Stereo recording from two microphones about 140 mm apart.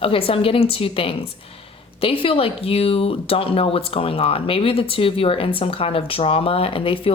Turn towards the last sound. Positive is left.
turn(degrees=40)  # may be behind; listen again after turning